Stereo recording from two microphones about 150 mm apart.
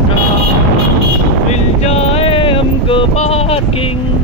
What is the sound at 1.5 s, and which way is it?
Boat, 45° left (ahead or behind).